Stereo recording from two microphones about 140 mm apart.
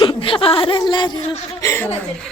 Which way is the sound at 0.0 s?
35° left (ahead or behind).